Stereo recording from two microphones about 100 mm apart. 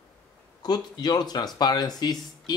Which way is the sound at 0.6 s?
45° left (ahead or behind).